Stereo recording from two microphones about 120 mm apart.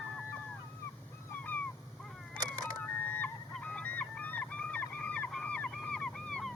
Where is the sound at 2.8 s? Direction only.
15° left (ahead or behind).